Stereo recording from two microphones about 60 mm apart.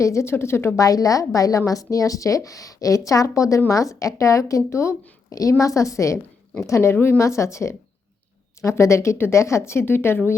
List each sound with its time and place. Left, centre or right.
0.0 s a woman's voice: left
0.8 s a woman's voice: left
5.3 s a woman's voice: left
6.9 s a woman's voice: left
7.2 s a woman's voice: left